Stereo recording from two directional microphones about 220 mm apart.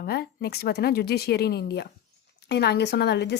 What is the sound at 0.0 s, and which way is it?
A woman's voice, 45° left (ahead or behind).